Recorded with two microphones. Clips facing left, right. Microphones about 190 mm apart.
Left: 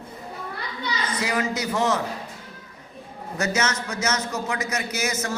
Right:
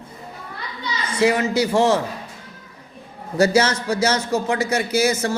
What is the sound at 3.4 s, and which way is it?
Speech, 30° right (ahead or behind).